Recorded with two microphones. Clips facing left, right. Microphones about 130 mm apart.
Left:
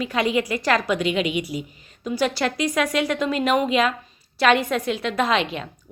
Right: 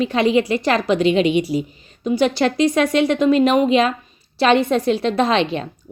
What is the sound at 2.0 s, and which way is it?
A woman's voice, 20° right (ahead or behind).